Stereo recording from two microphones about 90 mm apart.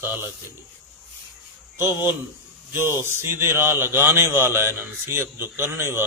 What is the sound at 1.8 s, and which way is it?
A man's voice, 20° right (ahead or behind).